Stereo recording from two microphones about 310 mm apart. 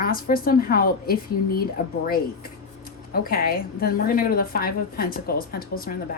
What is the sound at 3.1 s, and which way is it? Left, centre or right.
A woman's voice, left.